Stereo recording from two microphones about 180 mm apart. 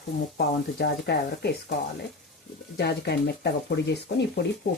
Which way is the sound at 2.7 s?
70° left (ahead or behind).